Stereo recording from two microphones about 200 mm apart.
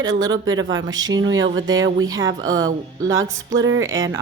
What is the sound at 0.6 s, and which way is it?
Speech, 70° right (ahead or behind).